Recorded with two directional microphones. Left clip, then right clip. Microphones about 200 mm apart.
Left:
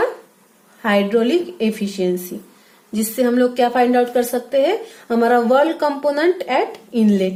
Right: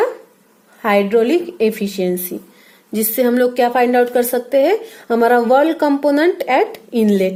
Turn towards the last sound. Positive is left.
turn(degrees=-40)  # may be behind; listen again after turning